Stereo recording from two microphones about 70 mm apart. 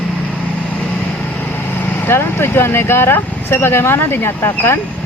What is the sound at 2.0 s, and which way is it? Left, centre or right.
Speech, left.